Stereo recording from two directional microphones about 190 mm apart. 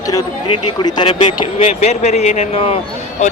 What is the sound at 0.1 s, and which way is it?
Speech, 25° left (ahead or behind).